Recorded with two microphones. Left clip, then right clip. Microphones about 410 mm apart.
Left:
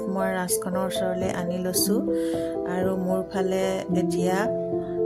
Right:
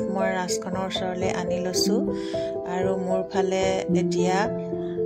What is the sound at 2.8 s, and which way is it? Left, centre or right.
Music, left.